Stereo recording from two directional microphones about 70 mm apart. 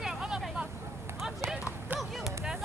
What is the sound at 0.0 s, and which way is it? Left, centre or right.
Vehicle, centre.